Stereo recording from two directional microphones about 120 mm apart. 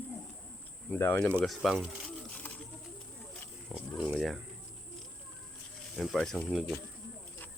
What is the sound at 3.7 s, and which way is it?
Speech, 5° right (ahead or behind).